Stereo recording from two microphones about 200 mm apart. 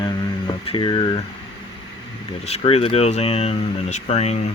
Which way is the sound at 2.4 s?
30° left (ahead or behind).